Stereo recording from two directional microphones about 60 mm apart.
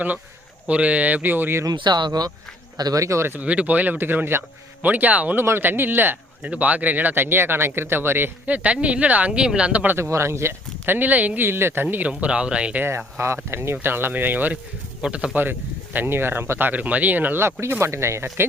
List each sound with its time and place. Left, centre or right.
0.7 s speech: right
2.7 s speech: right
3.4 s speech: right
5.4 s speech: right
8.4 s speech: right
9.8 s speech: right
10.1 s speech: right
11.4 s speech: right; by 12.8 s centre
13.1 s speech: right
15.0 s speech: centre
15.4 s speech: right
17.4 s speech: right